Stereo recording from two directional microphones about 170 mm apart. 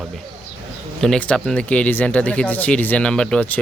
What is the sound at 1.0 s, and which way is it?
Speech, 5° left (ahead or behind).